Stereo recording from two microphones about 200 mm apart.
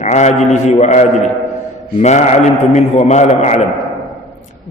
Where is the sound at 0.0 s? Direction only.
35° left (ahead or behind).